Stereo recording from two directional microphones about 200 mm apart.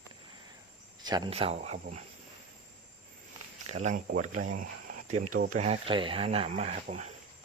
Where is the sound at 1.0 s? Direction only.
20° right (ahead or behind).